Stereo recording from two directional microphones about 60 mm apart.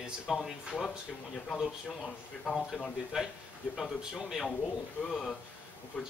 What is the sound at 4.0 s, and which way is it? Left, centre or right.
Speech, centre.